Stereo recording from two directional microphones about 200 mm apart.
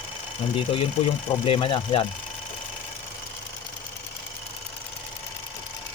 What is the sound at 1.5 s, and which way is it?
Speech, 25° left (ahead or behind).